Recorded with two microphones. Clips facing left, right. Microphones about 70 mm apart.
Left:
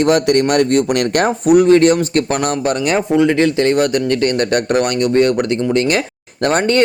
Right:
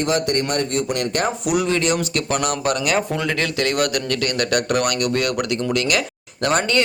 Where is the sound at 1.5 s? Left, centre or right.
Left.